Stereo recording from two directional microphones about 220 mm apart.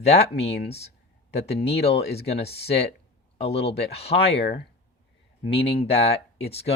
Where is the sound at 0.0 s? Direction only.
30° left (ahead or behind).